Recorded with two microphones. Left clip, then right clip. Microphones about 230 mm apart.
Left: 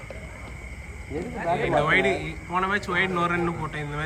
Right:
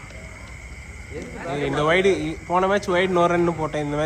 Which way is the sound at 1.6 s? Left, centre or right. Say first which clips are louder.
Right 3 dB; centre.